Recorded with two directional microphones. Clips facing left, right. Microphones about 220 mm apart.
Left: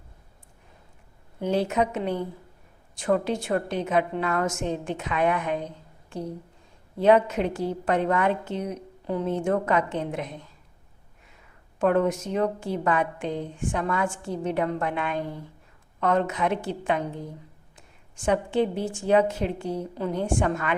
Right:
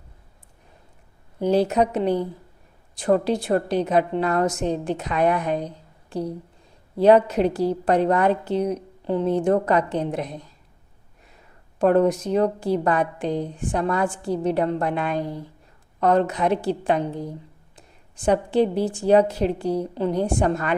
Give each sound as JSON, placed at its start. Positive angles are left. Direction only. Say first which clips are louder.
{"t": 1.4, "sound": "a woman's voice", "louder": "right 5 dB", "side_deg": -35}
{"t": 11.8, "sound": "a woman's voice", "louder": "right 4 dB", "side_deg": -35}